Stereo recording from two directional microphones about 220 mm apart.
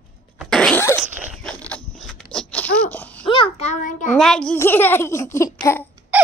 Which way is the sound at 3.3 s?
25° left (ahead or behind).